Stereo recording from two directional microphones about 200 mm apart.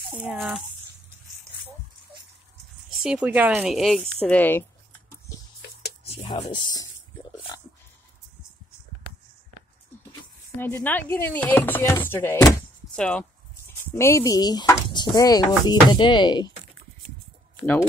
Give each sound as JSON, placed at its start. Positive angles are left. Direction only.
{"t": 0.1, "sound": "speech", "side_deg": -5}
{"t": 3.0, "sound": "speech", "side_deg": -5}
{"t": 6.0, "sound": "speech", "side_deg": 25}
{"t": 10.6, "sound": "speech", "side_deg": 10}
{"t": 13.9, "sound": "speech", "side_deg": 15}